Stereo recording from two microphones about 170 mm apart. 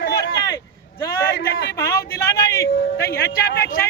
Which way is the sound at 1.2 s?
65° left (ahead or behind).